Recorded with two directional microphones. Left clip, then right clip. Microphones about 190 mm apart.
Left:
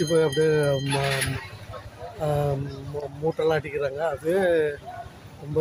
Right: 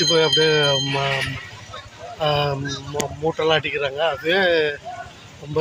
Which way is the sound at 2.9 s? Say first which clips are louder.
Right 6 dB; 20° right (ahead or behind).